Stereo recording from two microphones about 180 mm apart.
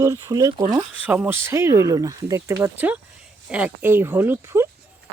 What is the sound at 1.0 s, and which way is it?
Speech, 10° right (ahead or behind).